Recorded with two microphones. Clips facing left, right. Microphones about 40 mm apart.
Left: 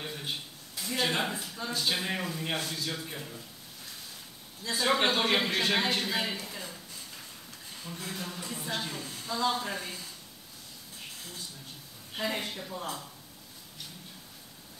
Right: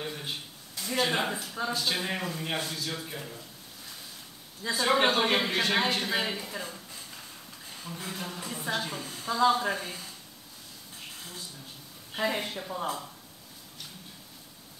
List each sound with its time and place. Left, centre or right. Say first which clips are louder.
0.0 s a sound: right 1 dB; centre
1.7 s a man's voice: left 1 dB; centre
4.7 s a man's voice: right 2 dB; centre
6.5 s a sound: right 4 dB; centre
7.8 s speech: right 1 dB; centre
9.2 s speech: right 6 dB; centre
12.2 s speech: right 3 dB; centre